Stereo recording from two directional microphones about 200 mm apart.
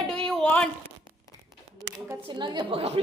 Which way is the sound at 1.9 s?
20° right (ahead or behind).